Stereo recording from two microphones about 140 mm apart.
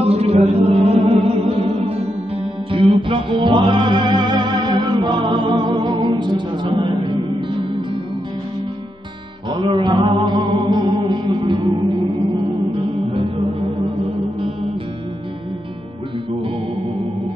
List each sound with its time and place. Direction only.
0.0 s music: 45° right (ahead or behind)
9.5 s music: 35° right (ahead or behind)